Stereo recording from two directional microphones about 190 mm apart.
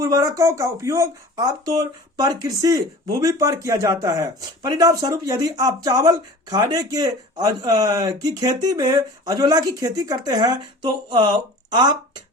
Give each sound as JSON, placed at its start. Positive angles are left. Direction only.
{"t": 0.0, "sound": "speech", "side_deg": -15}